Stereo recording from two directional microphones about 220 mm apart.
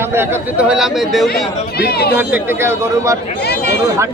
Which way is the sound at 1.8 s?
45° left (ahead or behind).